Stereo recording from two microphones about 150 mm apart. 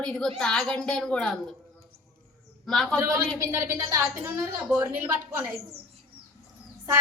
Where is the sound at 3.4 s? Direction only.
20° right (ahead or behind).